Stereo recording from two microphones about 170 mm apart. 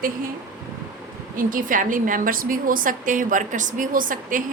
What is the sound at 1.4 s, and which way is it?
A woman's voice, 55° right (ahead or behind).